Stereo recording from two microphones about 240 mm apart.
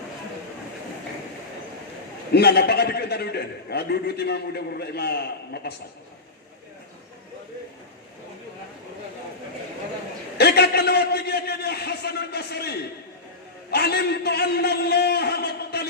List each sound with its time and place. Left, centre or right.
2.3 s a man's voice: left
10.3 s a sound: left
13.7 s a man's voice: left